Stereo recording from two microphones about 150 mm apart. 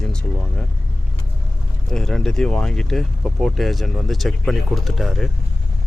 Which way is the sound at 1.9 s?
5° left (ahead or behind).